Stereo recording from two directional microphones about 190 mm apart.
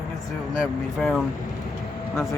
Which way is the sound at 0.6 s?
Centre (ahead or behind).